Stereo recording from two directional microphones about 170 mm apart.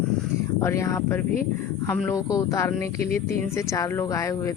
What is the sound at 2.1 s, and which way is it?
Speech, 20° left (ahead or behind).